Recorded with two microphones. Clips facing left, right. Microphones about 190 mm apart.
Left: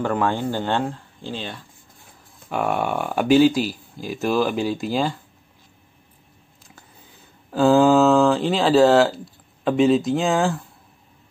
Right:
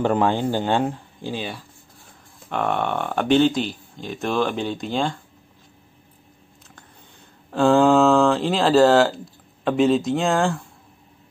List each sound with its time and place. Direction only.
0.0 s speech: 20° right (ahead or behind)
2.5 s speech: 5° left (ahead or behind)
6.7 s speech: 5° left (ahead or behind)